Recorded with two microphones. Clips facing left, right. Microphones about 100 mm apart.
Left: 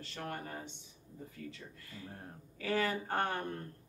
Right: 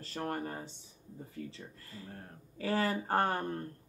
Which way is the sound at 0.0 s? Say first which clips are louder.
Right 5 dB; 35° right (ahead or behind).